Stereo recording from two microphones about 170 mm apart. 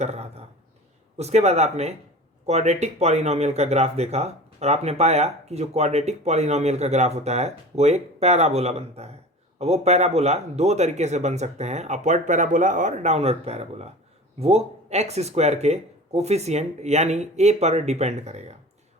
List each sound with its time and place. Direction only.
0.0 s speech: 40° right (ahead or behind)